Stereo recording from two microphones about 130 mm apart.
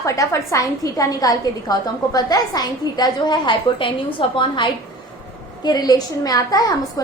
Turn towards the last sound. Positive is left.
turn(degrees=30)  # may be behind; listen again after turning